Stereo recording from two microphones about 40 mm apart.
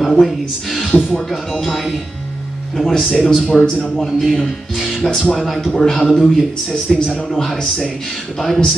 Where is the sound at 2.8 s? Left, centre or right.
Centre.